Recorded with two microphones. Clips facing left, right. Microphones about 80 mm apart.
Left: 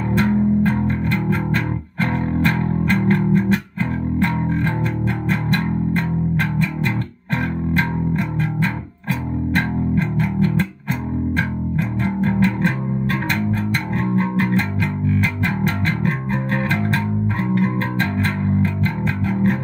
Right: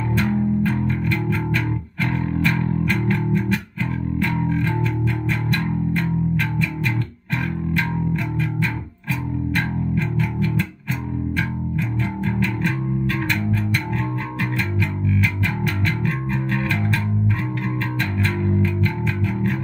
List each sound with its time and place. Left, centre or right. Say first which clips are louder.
0.2 s music: left 4 dB; left
7.7 s music: left 3 dB; left